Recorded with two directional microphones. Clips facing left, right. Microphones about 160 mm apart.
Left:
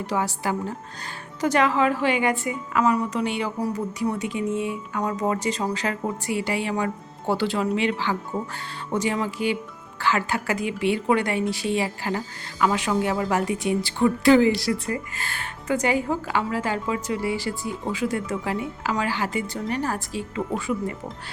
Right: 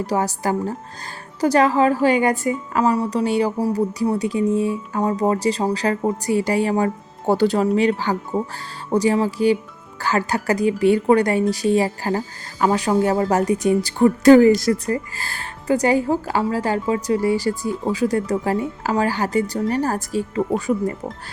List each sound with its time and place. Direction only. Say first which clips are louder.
0.0 s a woman's voice: right 4 dB; 40° right (ahead or behind)